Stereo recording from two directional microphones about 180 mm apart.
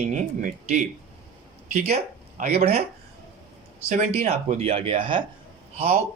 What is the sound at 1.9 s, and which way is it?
Speech, 40° right (ahead or behind).